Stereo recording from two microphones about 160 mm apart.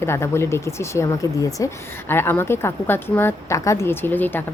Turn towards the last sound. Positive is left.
turn(degrees=10)  # may be behind; listen again after turning